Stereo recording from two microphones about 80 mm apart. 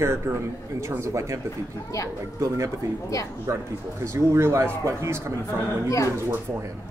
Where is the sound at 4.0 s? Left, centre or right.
Right.